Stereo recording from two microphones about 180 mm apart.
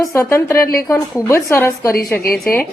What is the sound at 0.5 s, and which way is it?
Speech, 55° left (ahead or behind).